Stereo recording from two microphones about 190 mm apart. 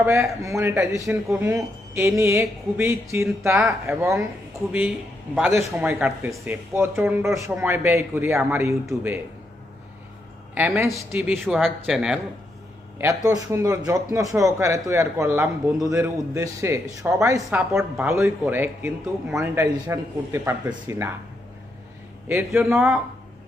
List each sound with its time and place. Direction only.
0.0 s a man's voice: 10° right (ahead or behind)
5.3 s a man's voice: 10° right (ahead or behind)
10.5 s a man's voice: 10° right (ahead or behind)
11.4 s speech: centre (ahead or behind)
13.0 s a man's voice: 15° right (ahead or behind)
22.3 s a man's voice: 10° right (ahead or behind)